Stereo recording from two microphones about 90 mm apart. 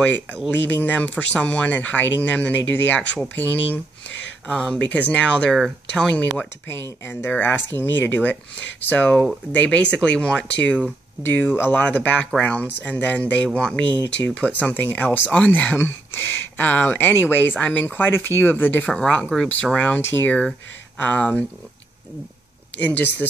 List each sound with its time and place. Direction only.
0.7 s speech: 20° left (ahead or behind)
4.5 s speech: 10° left (ahead or behind)
6.7 s speech: 25° left (ahead or behind)
11.2 s speech: 25° left (ahead or behind); by 13.7 s 5° left (ahead or behind)
14.6 s speech: 20° left (ahead or behind)
18.9 s speech: 10° left (ahead or behind)
22.8 s speech: 20° left (ahead or behind)